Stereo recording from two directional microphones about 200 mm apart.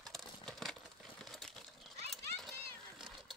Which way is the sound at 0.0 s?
Centre (ahead or behind).